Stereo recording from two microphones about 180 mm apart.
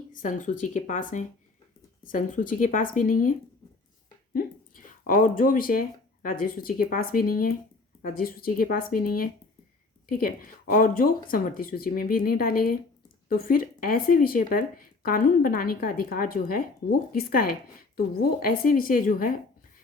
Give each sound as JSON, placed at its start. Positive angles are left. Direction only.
{"t": 0.1, "sound": "speech", "side_deg": 45}
{"t": 4.4, "sound": "a sound", "side_deg": 50}
{"t": 6.2, "sound": "speech", "side_deg": 50}